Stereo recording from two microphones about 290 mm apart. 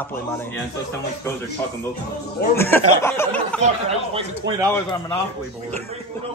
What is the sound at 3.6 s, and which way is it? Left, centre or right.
Speech, centre.